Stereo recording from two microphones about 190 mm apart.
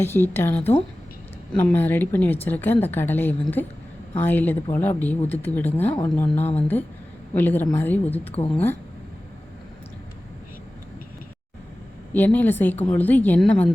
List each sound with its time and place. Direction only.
0.0 s a woman's voice: 10° left (ahead or behind)
5.8 s speech: 35° left (ahead or behind)
6.6 s a woman's voice: 10° left (ahead or behind)
12.1 s a woman's voice: 10° left (ahead or behind)